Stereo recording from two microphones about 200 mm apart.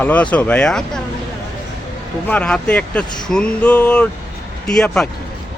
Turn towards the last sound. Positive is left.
turn(degrees=5)  # may be behind; listen again after turning